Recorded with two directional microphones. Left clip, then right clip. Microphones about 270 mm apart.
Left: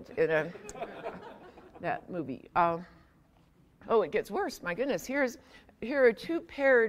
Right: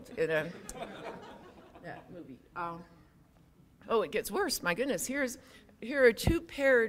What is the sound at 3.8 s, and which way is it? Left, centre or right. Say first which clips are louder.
Speech: left 3 dB; centre.